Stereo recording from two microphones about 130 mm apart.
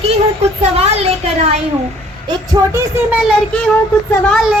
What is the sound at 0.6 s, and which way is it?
Speech, 50° right (ahead or behind).